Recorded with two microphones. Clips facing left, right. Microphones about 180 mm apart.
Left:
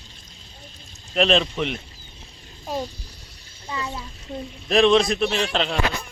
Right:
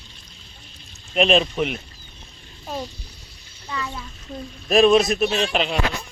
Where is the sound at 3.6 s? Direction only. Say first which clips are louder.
Even; 25° left (ahead or behind).